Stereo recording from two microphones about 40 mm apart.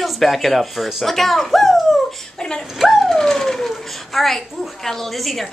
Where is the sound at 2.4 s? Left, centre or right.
Centre.